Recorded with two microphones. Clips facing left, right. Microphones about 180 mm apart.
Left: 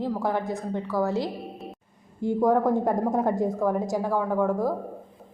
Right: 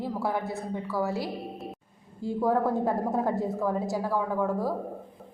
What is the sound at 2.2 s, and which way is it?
A woman's voice, 20° left (ahead or behind).